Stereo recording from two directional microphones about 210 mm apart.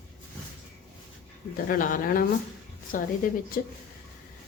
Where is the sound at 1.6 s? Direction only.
40° left (ahead or behind).